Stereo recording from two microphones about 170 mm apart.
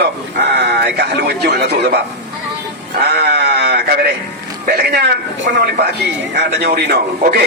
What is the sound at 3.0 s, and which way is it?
A man's voice, 70° right (ahead or behind).